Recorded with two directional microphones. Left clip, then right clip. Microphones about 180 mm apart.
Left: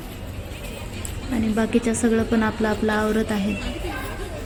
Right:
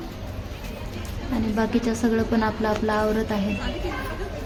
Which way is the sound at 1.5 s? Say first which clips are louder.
Left 2 dB; 10° left (ahead or behind).